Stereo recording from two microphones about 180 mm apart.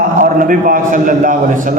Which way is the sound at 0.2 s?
50° right (ahead or behind).